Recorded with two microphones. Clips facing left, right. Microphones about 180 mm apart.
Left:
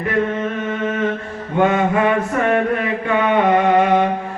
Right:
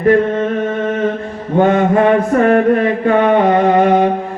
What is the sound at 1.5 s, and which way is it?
Mantra, 40° right (ahead or behind).